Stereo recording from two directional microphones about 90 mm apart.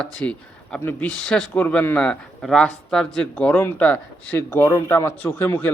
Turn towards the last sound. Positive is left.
turn(degrees=25)  # may be behind; listen again after turning